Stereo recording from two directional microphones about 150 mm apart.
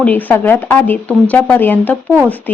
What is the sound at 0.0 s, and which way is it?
Speech, 10° left (ahead or behind).